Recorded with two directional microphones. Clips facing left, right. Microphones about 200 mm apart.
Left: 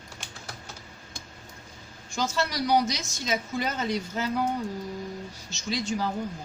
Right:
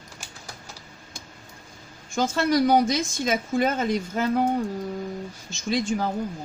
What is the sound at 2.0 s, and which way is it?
A woman's voice, 55° right (ahead or behind).